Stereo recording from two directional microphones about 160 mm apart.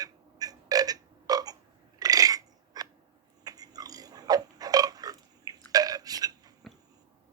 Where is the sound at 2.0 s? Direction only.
25° right (ahead or behind).